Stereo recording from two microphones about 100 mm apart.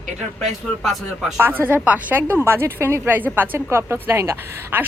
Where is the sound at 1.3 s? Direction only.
20° right (ahead or behind).